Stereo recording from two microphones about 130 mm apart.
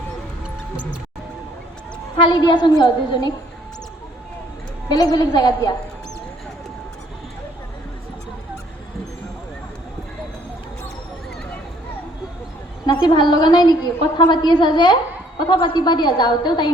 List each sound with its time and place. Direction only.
2.1 s a woman's voice: 35° left (ahead or behind)
4.9 s a woman's voice: 30° left (ahead or behind)
12.8 s a woman's voice: 35° left (ahead or behind)